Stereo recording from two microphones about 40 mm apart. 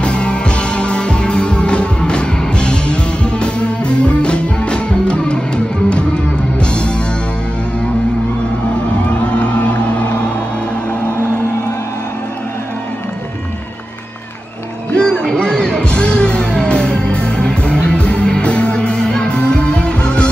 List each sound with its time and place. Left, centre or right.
0.0 s music: left
6.6 s music: left
9.4 s music: left
15.0 s music: left